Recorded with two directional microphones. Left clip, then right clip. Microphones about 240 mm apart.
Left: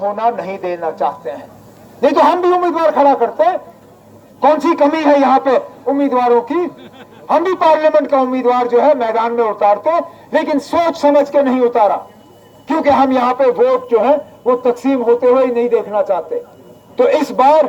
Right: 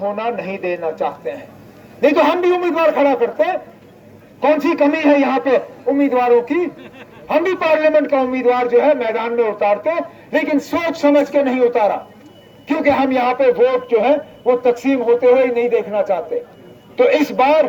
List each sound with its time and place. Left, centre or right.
0.0 s a man's voice: left